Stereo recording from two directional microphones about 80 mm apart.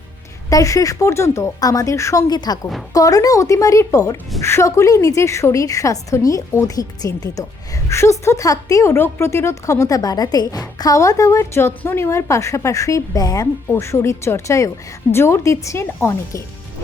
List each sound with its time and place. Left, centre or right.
0.5 s a woman's voice: left
2.3 s a woman's voice: left
2.9 s a woman's voice: left
7.9 s a woman's voice: left
13.7 s a woman's voice: left